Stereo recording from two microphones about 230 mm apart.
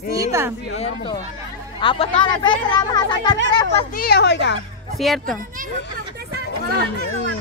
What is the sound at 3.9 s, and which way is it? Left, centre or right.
Speech, left.